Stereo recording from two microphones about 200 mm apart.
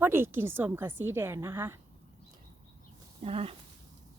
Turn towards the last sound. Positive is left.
turn(degrees=-30)  # may be behind; listen again after turning